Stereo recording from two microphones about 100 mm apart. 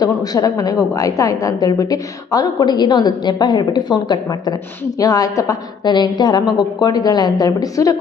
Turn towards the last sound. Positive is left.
turn(degrees=35)  # may be behind; listen again after turning